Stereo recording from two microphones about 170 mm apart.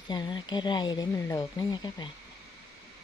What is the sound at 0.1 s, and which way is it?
Speech, 25° left (ahead or behind).